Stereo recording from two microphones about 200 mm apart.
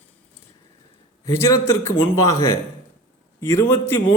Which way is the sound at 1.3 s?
15° left (ahead or behind).